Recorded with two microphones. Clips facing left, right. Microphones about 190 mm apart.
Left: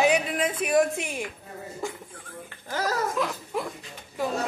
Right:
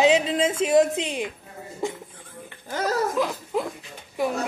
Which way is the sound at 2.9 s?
25° right (ahead or behind).